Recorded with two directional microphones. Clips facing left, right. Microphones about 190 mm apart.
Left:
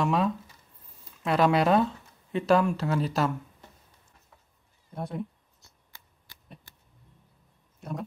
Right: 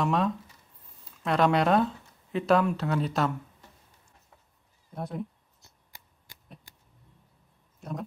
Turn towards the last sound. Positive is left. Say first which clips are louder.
# left 1 dB
turn(degrees=0)  # may be behind; listen again after turning